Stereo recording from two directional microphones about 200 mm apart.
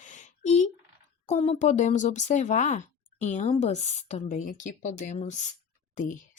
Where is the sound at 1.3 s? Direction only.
35° left (ahead or behind).